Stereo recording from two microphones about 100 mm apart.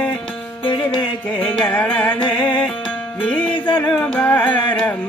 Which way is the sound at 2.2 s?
50° left (ahead or behind).